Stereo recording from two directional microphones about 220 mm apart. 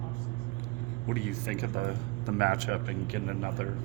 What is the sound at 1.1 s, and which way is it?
Speech, 50° right (ahead or behind).